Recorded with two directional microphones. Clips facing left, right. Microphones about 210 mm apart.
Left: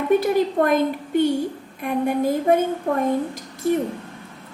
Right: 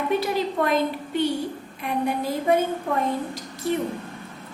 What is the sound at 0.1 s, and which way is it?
A woman's voice, 50° left (ahead or behind).